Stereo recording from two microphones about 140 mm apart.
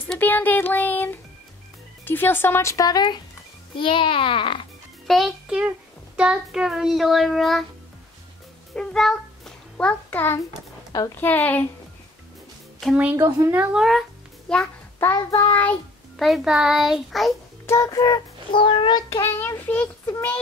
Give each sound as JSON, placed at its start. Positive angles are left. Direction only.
{"t": 0.0, "sound": "music", "side_deg": 10}
{"t": 2.0, "sound": "child singing", "side_deg": 15}
{"t": 3.7, "sound": "a child's voice", "side_deg": 35}
{"t": 5.0, "sound": "a child's voice", "side_deg": 0}
{"t": 6.1, "sound": "child singing", "side_deg": -5}
{"t": 8.7, "sound": "a sound", "side_deg": 5}
{"t": 11.1, "sound": "speech", "side_deg": 15}
{"t": 13.1, "sound": "speech", "side_deg": -20}
{"t": 14.5, "sound": "a sound", "side_deg": 5}
{"t": 15.1, "sound": "a child's voice", "side_deg": 30}
{"t": 16.2, "sound": "child singing", "side_deg": 0}
{"t": 17.6, "sound": "child singing", "side_deg": 20}